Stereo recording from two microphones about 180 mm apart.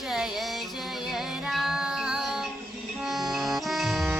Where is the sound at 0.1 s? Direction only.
Centre (ahead or behind).